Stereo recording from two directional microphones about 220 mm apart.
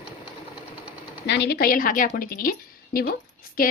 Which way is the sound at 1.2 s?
50° left (ahead or behind).